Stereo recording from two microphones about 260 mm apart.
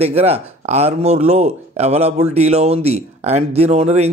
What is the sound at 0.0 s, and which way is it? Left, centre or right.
A man's voice, right.